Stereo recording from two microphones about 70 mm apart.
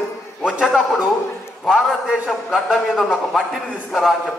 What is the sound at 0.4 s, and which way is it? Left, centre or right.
A man's voice, centre.